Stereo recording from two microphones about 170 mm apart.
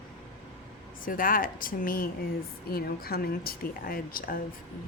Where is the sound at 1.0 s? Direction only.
55° left (ahead or behind).